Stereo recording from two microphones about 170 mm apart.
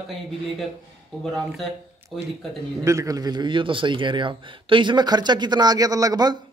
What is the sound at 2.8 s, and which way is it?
A man's voice, 20° right (ahead or behind).